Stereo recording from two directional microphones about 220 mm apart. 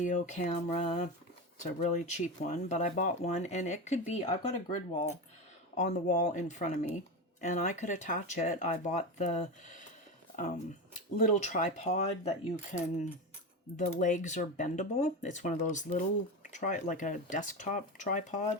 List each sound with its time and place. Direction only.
0.0 s speech: 35° left (ahead or behind)
11.3 s speech: 35° left (ahead or behind)